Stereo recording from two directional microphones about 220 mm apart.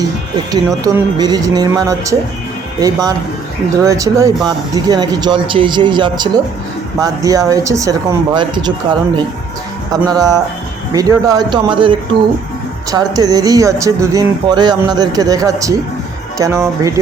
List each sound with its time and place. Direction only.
0.9 s speech: 15° right (ahead or behind)